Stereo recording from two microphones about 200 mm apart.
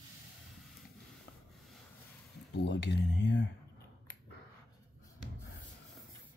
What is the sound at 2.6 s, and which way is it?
Speech, 60° left (ahead or behind).